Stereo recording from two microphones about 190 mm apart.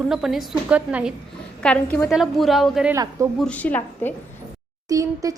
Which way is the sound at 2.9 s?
15° right (ahead or behind).